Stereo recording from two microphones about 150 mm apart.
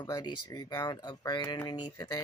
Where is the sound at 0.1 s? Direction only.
25° left (ahead or behind).